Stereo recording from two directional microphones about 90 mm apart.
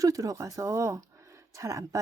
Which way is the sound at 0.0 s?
40° right (ahead or behind).